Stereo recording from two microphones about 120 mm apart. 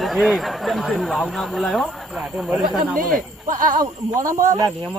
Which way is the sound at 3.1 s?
90° right.